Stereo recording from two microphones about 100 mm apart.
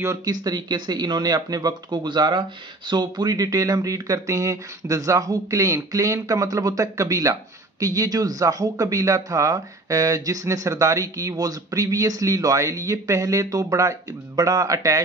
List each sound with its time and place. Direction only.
0.0 s speech: 30° right (ahead or behind)
0.3 s speech: 45° right (ahead or behind)